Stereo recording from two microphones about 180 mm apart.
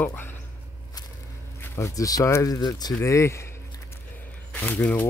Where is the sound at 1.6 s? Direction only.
15° left (ahead or behind).